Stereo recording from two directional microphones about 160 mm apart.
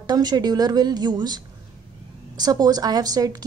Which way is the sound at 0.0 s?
25° right (ahead or behind).